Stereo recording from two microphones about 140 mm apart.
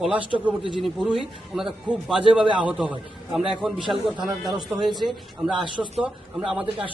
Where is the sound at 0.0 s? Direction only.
10° right (ahead or behind).